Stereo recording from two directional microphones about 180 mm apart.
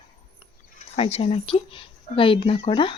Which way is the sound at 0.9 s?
35° left (ahead or behind).